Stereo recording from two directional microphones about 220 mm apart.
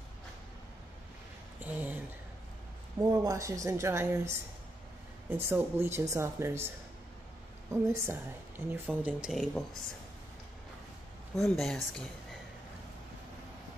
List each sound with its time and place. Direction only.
1.6 s speech: 5° right (ahead or behind)
3.0 s a woman's voice: 15° right (ahead or behind)
7.7 s a woman's voice: 10° right (ahead or behind)
11.3 s speech: centre (ahead or behind)